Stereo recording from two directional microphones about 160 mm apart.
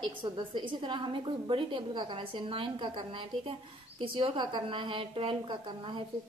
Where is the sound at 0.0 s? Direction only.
30° right (ahead or behind).